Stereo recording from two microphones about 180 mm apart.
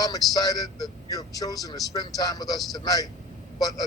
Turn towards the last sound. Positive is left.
turn(degrees=20)  # may be behind; listen again after turning